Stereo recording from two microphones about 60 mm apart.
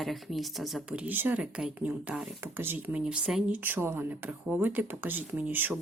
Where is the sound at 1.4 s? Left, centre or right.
Centre.